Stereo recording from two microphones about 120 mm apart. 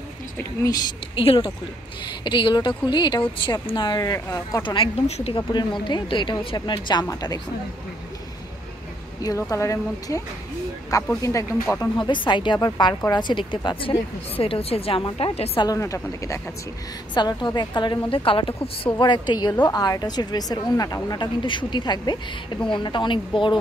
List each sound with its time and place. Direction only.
1.1 s a woman's voice: 50° left (ahead or behind); by 4.6 s 30° left (ahead or behind)
5.0 s speech: 60° left (ahead or behind)
5.5 s a woman's voice: 40° left (ahead or behind)
9.2 s speech: 30° left (ahead or behind)
12.0 s a woman's voice: 40° left (ahead or behind)
15.3 s speech: 60° left (ahead or behind)
15.6 s speech: 30° left (ahead or behind)
17.1 s a woman's voice: 40° left (ahead or behind)